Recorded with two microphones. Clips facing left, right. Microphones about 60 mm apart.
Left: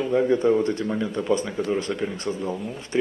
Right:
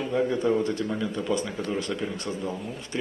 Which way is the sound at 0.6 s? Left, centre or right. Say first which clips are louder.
Left 3 dB; left.